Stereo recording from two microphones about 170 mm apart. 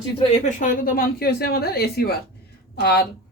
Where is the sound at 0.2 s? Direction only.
45° left (ahead or behind); by 3.1 s 70° left (ahead or behind).